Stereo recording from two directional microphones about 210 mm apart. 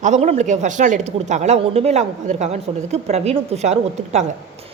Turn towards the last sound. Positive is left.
turn(degrees=-30)  # may be behind; listen again after turning